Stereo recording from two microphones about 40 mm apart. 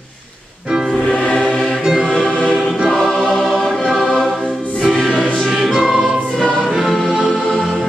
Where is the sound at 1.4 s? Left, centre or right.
Centre.